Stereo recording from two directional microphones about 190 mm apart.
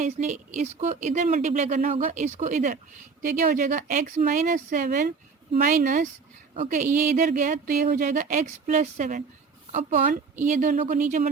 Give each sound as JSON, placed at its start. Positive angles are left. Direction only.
{"t": 0.0, "sound": "a woman's voice", "side_deg": -40}